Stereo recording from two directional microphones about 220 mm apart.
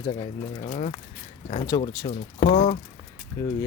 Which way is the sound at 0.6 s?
35° left (ahead or behind).